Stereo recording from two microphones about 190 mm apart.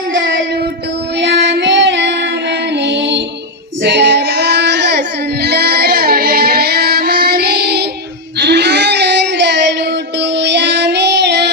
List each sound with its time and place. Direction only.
1.2 s child singing: 65° right (ahead or behind)
2.7 s music: 65° right (ahead or behind)
3.8 s child singing: 65° right (ahead or behind)
8.4 s a sound: 65° right (ahead or behind)
10.2 s child singing: 65° right (ahead or behind)